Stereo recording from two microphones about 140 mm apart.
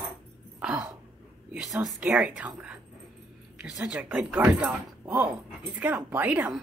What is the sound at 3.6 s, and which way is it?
Speech, 5° right (ahead or behind).